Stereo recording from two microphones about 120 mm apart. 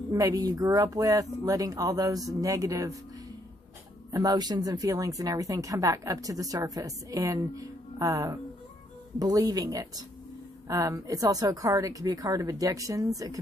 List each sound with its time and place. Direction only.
0.1 s speech: 30° right (ahead or behind)
4.1 s speech: 30° right (ahead or behind)